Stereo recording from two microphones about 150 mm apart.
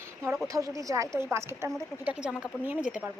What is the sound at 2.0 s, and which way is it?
A woman's voice, 5° right (ahead or behind).